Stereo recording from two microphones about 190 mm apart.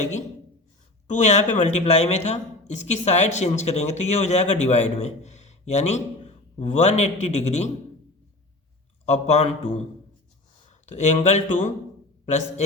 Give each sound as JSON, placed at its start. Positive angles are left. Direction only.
{"t": 1.0, "sound": "speech", "side_deg": 40}
{"t": 9.0, "sound": "speech", "side_deg": 35}